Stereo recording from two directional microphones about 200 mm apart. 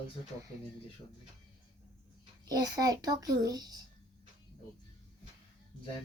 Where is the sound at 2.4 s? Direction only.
20° right (ahead or behind).